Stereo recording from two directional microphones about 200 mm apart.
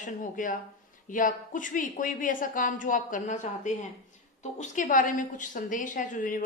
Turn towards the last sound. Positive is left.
turn(degrees=40)  # may be behind; listen again after turning